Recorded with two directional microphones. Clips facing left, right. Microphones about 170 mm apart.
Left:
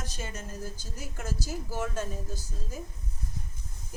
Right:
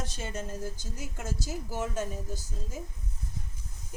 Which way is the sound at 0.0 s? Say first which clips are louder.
Right 3 dB; 25° right (ahead or behind).